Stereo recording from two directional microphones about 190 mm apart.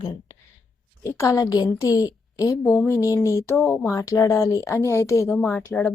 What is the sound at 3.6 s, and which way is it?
Speech, centre (ahead or behind).